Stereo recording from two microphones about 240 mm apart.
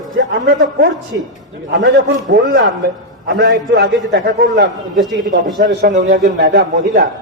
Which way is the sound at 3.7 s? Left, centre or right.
Right.